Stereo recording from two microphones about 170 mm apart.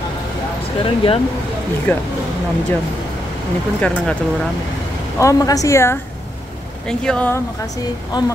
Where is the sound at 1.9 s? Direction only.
10° left (ahead or behind).